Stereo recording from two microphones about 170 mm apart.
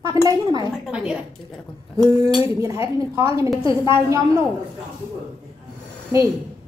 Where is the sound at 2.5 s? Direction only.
20° right (ahead or behind).